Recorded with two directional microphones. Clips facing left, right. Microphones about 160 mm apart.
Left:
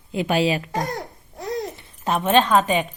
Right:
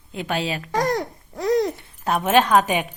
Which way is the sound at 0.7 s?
90° right.